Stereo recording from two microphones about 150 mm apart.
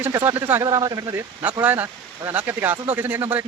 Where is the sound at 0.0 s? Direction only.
15° right (ahead or behind).